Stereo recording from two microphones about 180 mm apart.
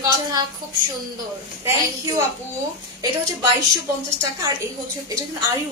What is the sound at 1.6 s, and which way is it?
Speech, 15° right (ahead or behind).